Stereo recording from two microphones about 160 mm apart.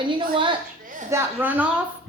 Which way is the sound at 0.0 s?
30° right (ahead or behind).